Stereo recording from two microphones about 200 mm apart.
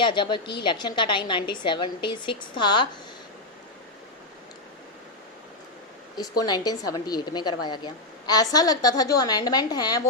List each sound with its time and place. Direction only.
0.0 s a woman's voice: 25° left (ahead or behind)
6.1 s a woman's voice: 20° left (ahead or behind)